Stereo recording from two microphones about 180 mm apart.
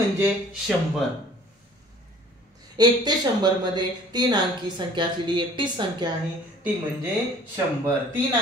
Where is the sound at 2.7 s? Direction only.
20° right (ahead or behind).